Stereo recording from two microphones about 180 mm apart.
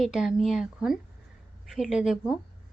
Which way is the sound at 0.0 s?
5° right (ahead or behind).